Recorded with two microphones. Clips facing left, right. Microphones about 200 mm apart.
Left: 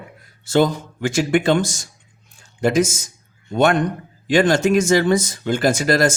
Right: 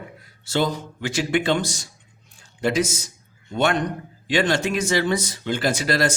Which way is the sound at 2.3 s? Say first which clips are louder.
Left 4 dB; 45° left (ahead or behind).